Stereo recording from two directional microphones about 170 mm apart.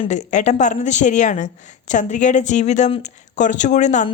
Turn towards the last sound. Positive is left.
turn(degrees=45)  # may be behind; listen again after turning